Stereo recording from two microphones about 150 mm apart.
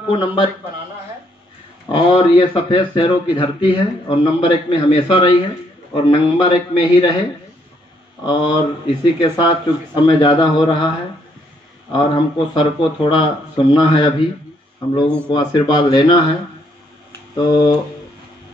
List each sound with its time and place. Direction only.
0.1 s speech: 35° left (ahead or behind)
1.9 s speech: 35° left (ahead or behind)
8.3 s speech: 30° left (ahead or behind)
11.9 s speech: 35° left (ahead or behind)
15.2 s speech: 30° left (ahead or behind)
17.4 s speech: 30° left (ahead or behind)